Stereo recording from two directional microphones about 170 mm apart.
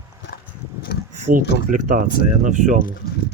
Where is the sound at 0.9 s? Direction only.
65° left (ahead or behind).